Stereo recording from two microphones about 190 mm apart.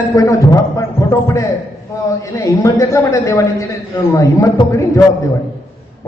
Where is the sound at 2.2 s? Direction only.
15° left (ahead or behind).